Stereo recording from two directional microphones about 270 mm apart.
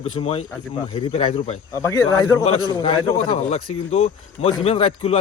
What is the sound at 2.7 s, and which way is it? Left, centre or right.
Speech, left.